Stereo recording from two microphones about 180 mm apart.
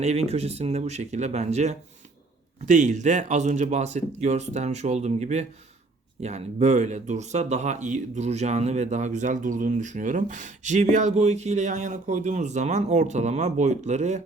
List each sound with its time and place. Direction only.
0.0 s speech: 35° right (ahead or behind)